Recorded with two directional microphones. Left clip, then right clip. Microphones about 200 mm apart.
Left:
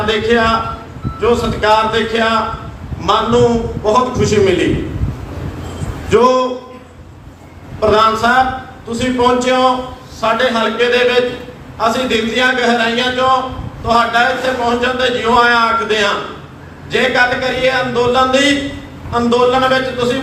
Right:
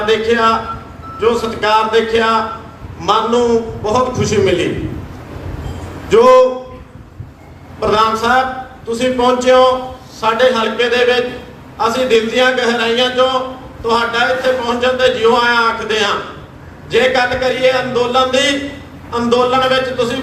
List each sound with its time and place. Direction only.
0.0 s a man's voice: 40° right (ahead or behind)
6.1 s a man's voice: 40° right (ahead or behind)
7.8 s a man's voice: 40° right (ahead or behind)